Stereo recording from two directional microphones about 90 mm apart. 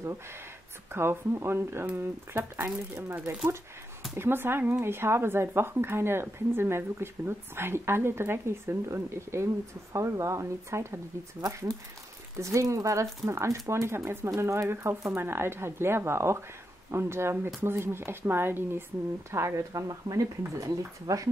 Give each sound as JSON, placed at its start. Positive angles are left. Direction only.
{"t": 0.9, "sound": "speech", "side_deg": -30}
{"t": 12.4, "sound": "speech", "side_deg": -35}